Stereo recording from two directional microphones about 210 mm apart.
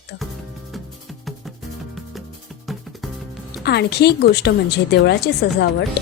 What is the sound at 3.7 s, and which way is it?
A woman's voice, 50° left (ahead or behind).